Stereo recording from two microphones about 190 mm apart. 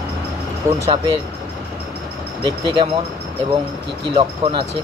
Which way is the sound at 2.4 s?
25° right (ahead or behind).